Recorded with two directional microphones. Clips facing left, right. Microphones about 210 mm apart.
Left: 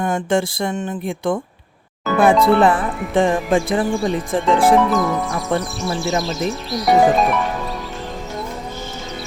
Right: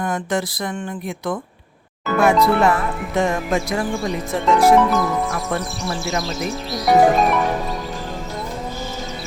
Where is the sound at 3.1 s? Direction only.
30° left (ahead or behind).